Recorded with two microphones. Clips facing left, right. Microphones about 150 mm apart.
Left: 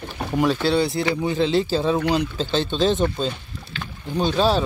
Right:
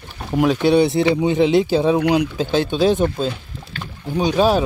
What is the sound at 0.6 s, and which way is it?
Speech, 20° right (ahead or behind).